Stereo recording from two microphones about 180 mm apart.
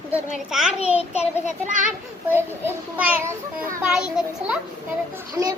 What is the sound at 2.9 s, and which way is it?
A child's voice, 10° right (ahead or behind).